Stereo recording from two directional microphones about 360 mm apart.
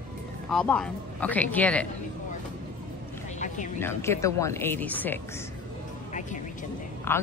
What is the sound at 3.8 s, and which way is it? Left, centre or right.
Speech, centre.